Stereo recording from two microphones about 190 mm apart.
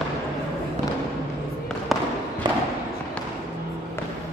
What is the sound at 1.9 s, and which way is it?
Fireworks, centre (ahead or behind).